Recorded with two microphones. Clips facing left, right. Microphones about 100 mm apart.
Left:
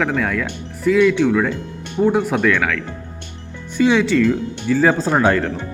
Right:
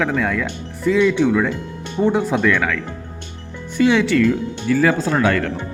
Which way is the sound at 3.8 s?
20° left (ahead or behind).